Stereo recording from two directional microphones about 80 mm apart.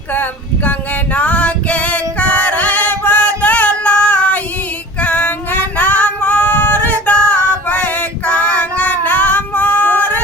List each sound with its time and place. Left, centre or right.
0.1 s a sound: left
1.1 s singing: centre
5.0 s female singing: centre
8.3 s child singing: centre